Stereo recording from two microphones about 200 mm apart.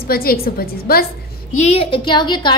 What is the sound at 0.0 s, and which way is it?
A woman's voice, 50° left (ahead or behind).